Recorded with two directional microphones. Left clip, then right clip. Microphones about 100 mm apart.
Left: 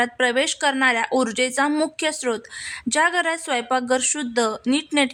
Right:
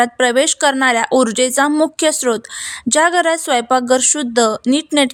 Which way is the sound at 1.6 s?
15° right (ahead or behind).